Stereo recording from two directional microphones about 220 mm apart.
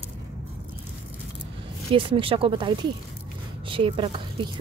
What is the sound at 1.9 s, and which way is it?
A woman's voice, 25° right (ahead or behind).